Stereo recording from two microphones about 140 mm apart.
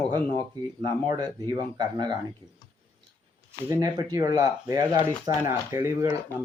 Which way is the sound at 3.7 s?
25° right (ahead or behind).